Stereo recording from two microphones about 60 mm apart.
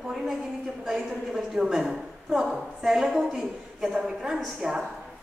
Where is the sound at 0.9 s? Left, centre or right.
Centre.